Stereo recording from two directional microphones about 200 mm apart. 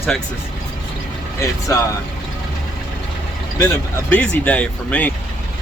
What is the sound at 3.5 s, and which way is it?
Speech, 15° left (ahead or behind).